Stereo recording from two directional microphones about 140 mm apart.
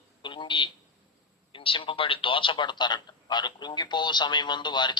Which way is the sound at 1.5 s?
40° left (ahead or behind).